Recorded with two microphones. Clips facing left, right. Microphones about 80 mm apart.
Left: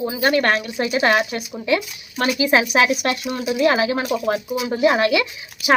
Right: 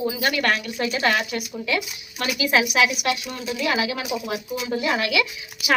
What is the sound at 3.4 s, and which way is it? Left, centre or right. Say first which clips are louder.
Speech: left 7 dB; centre.